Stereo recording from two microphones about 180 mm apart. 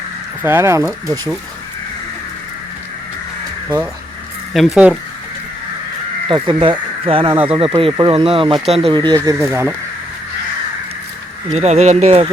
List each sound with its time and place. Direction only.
0.4 s speech: 15° right (ahead or behind)
4.5 s speech: centre (ahead or behind)
6.2 s speech: 25° right (ahead or behind)
11.5 s speech: 35° right (ahead or behind)